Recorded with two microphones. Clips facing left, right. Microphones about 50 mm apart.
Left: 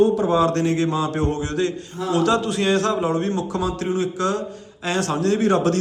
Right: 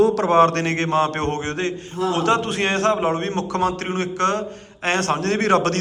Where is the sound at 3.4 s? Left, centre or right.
Right.